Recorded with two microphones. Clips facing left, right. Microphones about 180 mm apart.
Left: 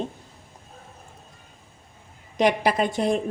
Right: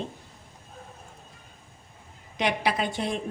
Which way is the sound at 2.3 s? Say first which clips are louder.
Left 6 dB; 45° left (ahead or behind).